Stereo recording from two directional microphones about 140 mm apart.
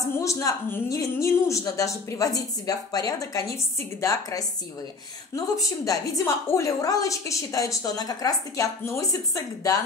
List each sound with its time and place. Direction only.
0.2 s a woman's voice: 20° left (ahead or behind)